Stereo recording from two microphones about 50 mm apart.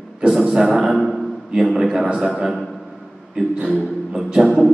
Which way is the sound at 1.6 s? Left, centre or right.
Centre.